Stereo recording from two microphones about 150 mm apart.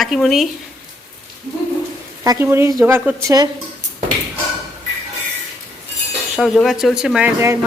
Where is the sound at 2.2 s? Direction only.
20° right (ahead or behind).